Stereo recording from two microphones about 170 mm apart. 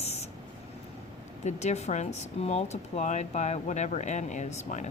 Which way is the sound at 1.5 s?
40° left (ahead or behind).